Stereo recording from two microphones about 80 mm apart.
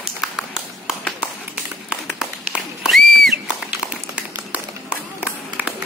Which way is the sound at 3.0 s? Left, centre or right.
Centre.